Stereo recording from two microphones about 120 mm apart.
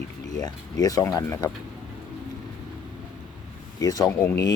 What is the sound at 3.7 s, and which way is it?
Speech, 30° left (ahead or behind).